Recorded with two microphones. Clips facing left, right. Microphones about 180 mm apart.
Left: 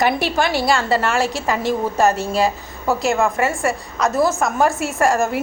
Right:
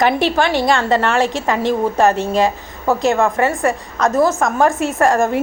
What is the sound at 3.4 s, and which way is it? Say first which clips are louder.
A woman's voice: right 3 dB; 10° left (ahead or behind).